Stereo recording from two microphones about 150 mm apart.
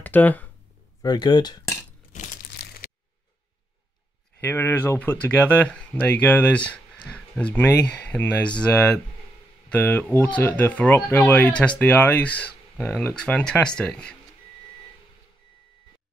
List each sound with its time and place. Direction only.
0.0 s speech: 10° left (ahead or behind)
1.0 s speech: 30° left (ahead or behind)
4.4 s speech: 15° left (ahead or behind)